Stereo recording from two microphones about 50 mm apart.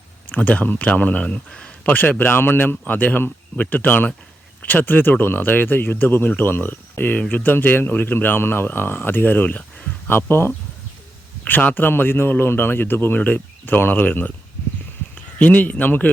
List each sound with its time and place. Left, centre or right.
0.3 s speech: left
1.5 s a sound: centre
1.9 s a man's voice: left
2.9 s a man's voice: left
10.1 s a man's voice: left
11.4 s a man's voice: left
15.4 s speech: left